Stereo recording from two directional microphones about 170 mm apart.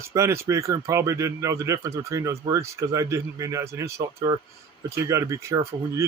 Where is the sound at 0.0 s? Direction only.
15° right (ahead or behind).